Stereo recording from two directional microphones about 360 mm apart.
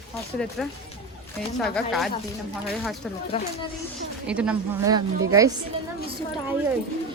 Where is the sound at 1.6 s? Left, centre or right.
Centre.